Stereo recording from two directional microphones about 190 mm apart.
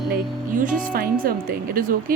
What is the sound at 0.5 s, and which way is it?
Speech, 45° right (ahead or behind).